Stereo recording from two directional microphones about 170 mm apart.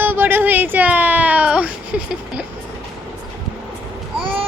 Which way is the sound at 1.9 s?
5° right (ahead or behind).